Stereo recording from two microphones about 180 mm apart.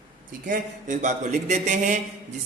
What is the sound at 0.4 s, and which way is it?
A man's voice, 45° right (ahead or behind).